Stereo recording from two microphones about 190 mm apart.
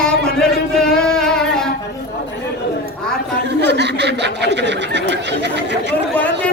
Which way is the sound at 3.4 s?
65° right (ahead or behind).